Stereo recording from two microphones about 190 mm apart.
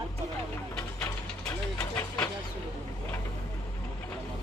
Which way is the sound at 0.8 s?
5° left (ahead or behind).